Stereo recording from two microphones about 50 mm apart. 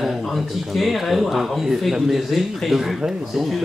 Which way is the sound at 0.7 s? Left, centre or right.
Centre.